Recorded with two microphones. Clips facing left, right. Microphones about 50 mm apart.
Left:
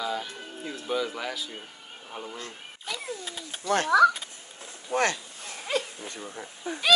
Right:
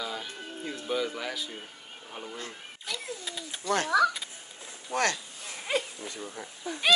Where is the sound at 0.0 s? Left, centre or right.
Centre.